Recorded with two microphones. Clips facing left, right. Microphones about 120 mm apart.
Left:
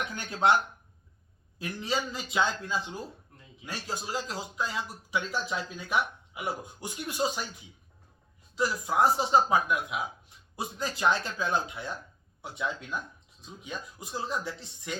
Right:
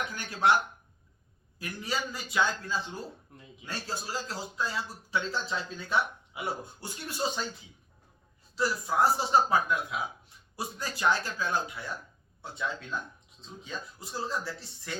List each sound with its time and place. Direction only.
0.2 s speech: 25° left (ahead or behind)
1.5 s speech: 20° left (ahead or behind)
8.5 s speech: 15° left (ahead or behind)